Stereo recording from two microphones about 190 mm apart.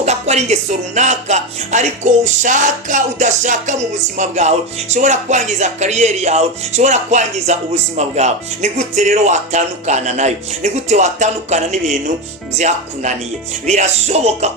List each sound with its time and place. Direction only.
0.0 s speech: 35° right (ahead or behind)